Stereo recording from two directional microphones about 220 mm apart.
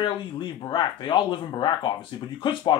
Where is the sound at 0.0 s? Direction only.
20° left (ahead or behind).